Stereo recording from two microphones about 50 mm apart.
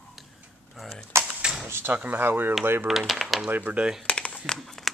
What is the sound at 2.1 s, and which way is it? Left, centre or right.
Speech, right.